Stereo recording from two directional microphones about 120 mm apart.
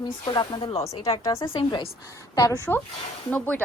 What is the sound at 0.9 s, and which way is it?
Speech, 55° left (ahead or behind).